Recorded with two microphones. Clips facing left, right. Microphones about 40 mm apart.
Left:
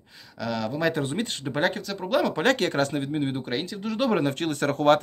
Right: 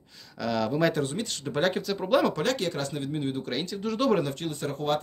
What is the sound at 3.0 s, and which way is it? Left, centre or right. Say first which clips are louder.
Speech: left 3 dB; left.